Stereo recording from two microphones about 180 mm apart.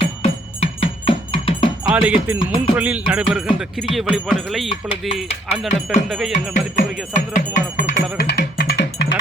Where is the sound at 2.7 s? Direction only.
10° right (ahead or behind).